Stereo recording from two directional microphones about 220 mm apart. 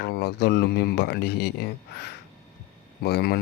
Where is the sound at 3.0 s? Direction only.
45° left (ahead or behind).